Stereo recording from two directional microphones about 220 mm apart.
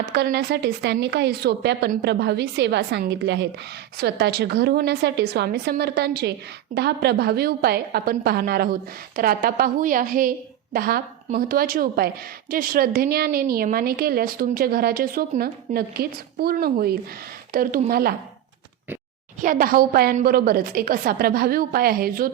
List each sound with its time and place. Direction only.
0.1 s a woman's voice: 50° right (ahead or behind)
19.4 s a woman's voice: 40° right (ahead or behind)